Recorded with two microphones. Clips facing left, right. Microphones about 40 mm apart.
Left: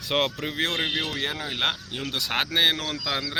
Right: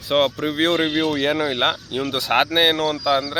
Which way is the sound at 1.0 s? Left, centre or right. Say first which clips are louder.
Right 10 dB; right.